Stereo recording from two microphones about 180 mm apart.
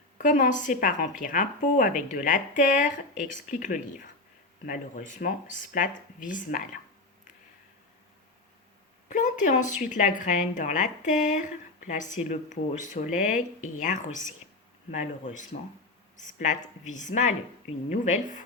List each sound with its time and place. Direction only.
0.2 s speech: 45° left (ahead or behind)
9.0 s speech: 45° left (ahead or behind)